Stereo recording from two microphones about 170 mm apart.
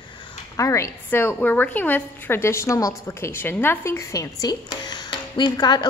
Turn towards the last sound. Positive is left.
turn(degrees=25)  # may be behind; listen again after turning